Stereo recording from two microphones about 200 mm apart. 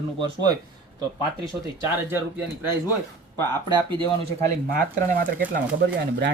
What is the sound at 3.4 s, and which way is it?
Speech, 20° right (ahead or behind).